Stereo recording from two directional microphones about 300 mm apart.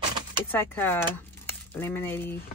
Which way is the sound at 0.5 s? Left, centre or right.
Centre.